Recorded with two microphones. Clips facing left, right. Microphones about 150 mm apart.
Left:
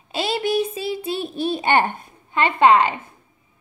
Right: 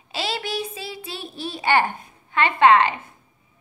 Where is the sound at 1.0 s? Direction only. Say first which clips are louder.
Left 9 dB; 50° left (ahead or behind).